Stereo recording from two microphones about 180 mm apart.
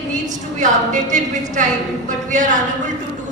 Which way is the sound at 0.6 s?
45° right (ahead or behind).